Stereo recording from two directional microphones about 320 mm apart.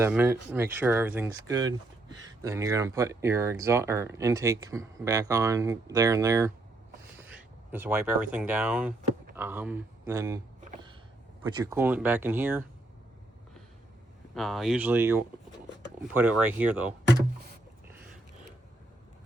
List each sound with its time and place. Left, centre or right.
0.0 s speech: centre
10.6 s a sound: centre
11.4 s speech: centre
14.3 s speech: centre